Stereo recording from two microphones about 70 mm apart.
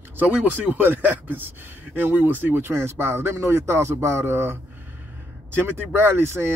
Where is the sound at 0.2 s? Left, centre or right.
Right.